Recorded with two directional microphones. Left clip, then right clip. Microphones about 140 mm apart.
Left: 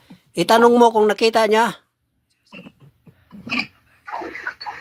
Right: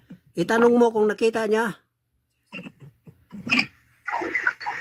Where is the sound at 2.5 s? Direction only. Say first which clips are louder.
Right 2 dB; 30° right (ahead or behind).